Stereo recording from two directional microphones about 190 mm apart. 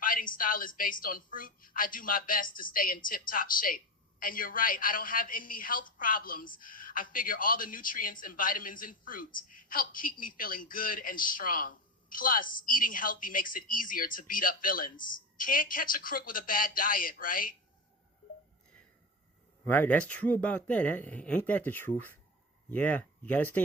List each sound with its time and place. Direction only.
0.0 s a woman's voice: 45° left (ahead or behind)
19.6 s speech: 10° left (ahead or behind)